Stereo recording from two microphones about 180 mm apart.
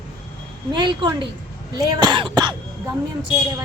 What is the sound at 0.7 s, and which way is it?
A woman's voice, 25° right (ahead or behind).